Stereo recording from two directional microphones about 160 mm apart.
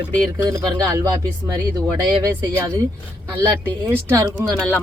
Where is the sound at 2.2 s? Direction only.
15° right (ahead or behind).